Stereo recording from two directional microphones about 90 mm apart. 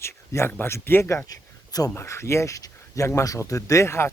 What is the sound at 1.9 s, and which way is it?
Speech, 30° left (ahead or behind).